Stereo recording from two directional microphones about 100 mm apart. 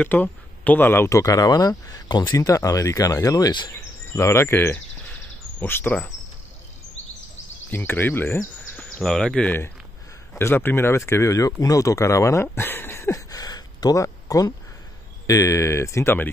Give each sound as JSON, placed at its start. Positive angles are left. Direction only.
{"t": 0.0, "sound": "speech", "side_deg": 15}
{"t": 1.1, "sound": "speech", "side_deg": 35}
{"t": 4.1, "sound": "speech", "side_deg": 30}
{"t": 7.7, "sound": "speech", "side_deg": 20}
{"t": 8.8, "sound": "speech", "side_deg": 5}
{"t": 10.4, "sound": "speech", "side_deg": 20}